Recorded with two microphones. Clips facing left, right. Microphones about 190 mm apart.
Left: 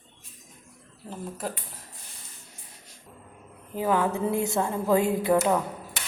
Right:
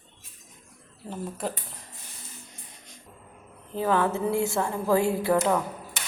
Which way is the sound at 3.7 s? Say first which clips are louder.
Even; 15° left (ahead or behind).